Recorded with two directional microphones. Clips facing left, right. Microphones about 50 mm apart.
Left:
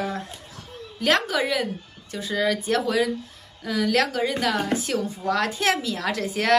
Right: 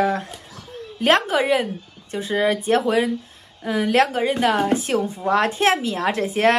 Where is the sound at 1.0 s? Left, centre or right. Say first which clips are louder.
Right 4 dB; right.